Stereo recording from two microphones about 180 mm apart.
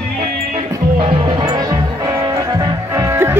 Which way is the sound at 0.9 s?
30° right (ahead or behind).